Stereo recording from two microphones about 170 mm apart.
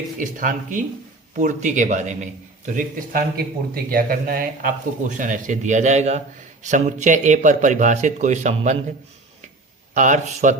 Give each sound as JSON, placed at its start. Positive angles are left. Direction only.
{"t": 0.2, "sound": "a man's voice", "side_deg": -50}
{"t": 9.9, "sound": "speech", "side_deg": -45}